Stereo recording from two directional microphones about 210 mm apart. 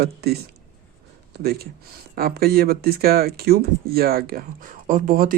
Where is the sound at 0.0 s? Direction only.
50° right (ahead or behind).